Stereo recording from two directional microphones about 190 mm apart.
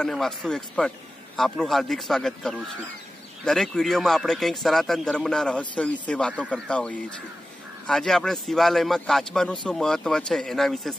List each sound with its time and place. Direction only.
0.0 s a man's voice: centre (ahead or behind)